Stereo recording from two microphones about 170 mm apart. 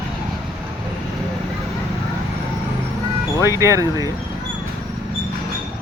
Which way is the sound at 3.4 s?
15° right (ahead or behind).